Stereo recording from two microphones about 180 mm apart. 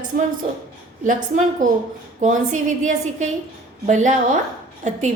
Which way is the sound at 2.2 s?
45° right (ahead or behind).